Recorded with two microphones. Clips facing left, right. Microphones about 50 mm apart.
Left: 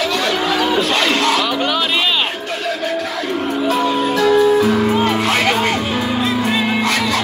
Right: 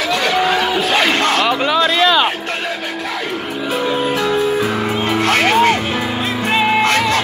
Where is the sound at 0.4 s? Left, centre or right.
Centre.